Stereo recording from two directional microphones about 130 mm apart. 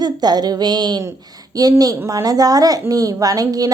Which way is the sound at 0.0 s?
30° right (ahead or behind).